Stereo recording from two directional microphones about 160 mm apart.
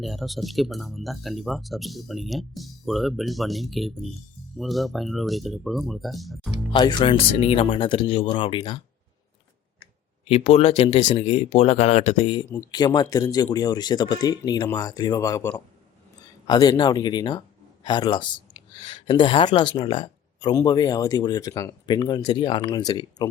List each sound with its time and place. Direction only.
0.0 s speech: centre (ahead or behind)
6.7 s speech: 30° left (ahead or behind)
10.2 s speech: 40° left (ahead or behind)